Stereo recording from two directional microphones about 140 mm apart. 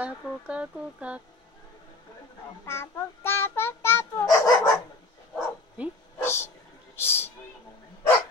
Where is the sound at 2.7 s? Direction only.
15° left (ahead or behind).